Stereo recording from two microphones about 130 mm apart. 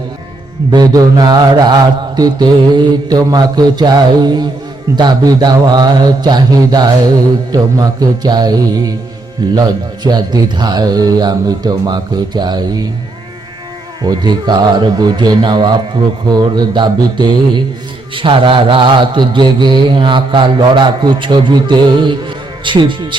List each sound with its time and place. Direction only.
0.7 s mantra: 30° right (ahead or behind)
7.5 s music: 30° right (ahead or behind)
9.6 s mantra: 30° right (ahead or behind)
14.0 s mantra: 30° right (ahead or behind)